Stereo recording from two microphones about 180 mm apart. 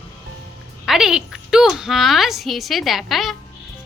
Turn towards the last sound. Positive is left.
turn(degrees=0)  # may be behind; listen again after turning